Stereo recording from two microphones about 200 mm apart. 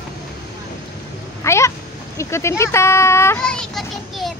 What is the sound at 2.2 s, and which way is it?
A child's voice, 15° left (ahead or behind).